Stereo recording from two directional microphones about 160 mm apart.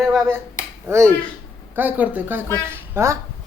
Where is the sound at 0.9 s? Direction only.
15° right (ahead or behind).